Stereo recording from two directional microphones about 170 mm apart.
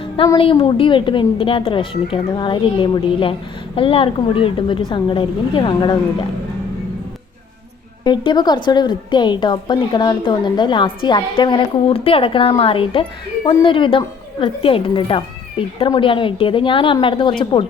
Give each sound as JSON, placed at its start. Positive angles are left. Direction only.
{"t": 0.3, "sound": "a woman's voice", "side_deg": 30}
{"t": 8.0, "sound": "a woman's voice", "side_deg": 25}